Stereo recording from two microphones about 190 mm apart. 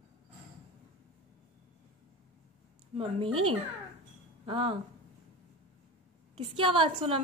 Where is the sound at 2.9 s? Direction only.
30° right (ahead or behind).